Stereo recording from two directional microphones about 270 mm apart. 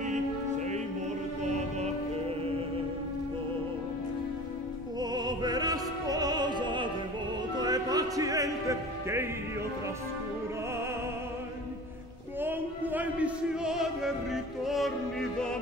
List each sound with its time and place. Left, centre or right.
0.0 s music: right
5.1 s opera: centre
7.5 s music: centre
12.4 s music: centre